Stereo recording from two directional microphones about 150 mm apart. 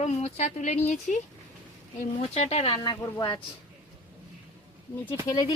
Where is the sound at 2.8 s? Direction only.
30° left (ahead or behind).